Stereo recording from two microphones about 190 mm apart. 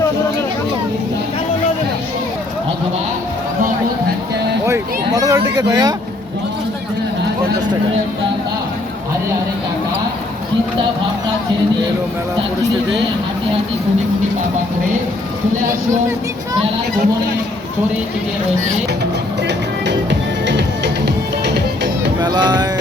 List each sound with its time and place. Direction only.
4.6 s a sound: 15° right (ahead or behind)
20.4 s music: 65° right (ahead or behind)
22.2 s speech: 20° right (ahead or behind)